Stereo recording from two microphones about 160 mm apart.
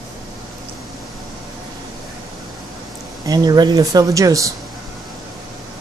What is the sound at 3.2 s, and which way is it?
Speech, 25° right (ahead or behind).